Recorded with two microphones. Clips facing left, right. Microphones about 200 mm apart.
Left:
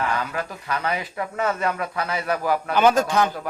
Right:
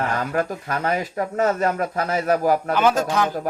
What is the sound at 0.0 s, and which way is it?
Speech, 45° right (ahead or behind).